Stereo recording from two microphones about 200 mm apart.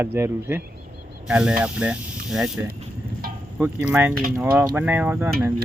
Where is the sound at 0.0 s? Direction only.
10° right (ahead or behind).